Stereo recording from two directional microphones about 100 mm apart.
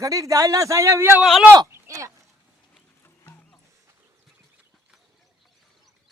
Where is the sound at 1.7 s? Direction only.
30° right (ahead or behind).